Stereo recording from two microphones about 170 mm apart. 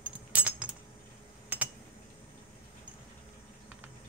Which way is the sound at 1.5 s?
10° right (ahead or behind).